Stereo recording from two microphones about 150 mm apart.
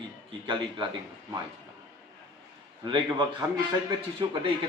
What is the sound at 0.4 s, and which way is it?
Speech, 35° right (ahead or behind).